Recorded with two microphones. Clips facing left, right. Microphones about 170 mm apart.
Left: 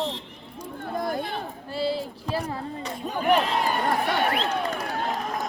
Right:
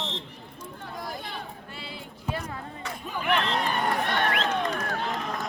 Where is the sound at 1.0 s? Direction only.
55° left (ahead or behind).